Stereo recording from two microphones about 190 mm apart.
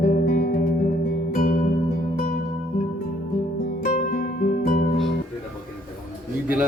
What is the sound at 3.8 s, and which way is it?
Music, 45° left (ahead or behind).